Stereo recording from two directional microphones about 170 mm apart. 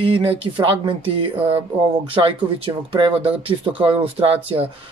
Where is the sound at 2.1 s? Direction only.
30° right (ahead or behind).